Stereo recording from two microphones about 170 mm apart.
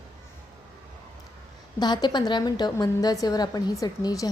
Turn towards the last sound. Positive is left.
turn(degrees=25)  # may be behind; listen again after turning